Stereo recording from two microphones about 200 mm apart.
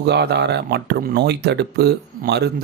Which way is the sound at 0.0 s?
55° right (ahead or behind).